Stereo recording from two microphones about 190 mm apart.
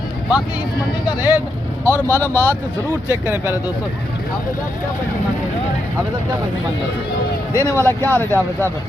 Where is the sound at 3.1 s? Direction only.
10° right (ahead or behind).